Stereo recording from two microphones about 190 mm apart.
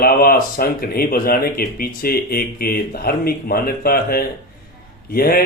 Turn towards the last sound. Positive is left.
turn(degrees=50)  # may be behind; listen again after turning